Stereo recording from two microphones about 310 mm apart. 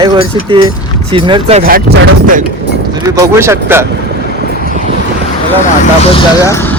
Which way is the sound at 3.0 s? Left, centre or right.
Centre.